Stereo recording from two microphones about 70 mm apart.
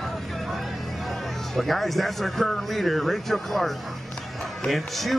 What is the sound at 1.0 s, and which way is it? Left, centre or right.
A man's voice, centre.